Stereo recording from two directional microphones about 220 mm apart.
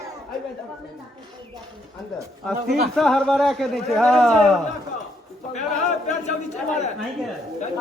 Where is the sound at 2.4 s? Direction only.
Centre (ahead or behind).